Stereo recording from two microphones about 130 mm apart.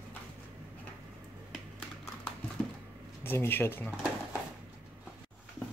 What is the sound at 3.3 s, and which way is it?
Speech, 15° left (ahead or behind).